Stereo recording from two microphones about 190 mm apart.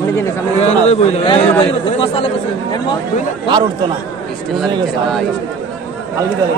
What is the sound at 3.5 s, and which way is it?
Speech, 25° right (ahead or behind).